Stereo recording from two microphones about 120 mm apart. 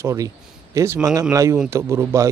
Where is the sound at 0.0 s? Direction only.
25° right (ahead or behind).